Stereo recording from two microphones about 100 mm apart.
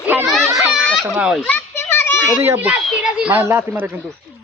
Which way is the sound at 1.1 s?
5° right (ahead or behind).